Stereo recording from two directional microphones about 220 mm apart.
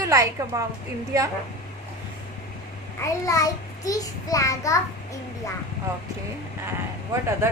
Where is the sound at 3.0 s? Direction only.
15° left (ahead or behind).